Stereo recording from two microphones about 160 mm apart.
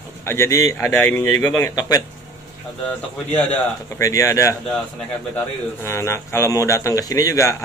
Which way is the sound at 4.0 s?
20° left (ahead or behind).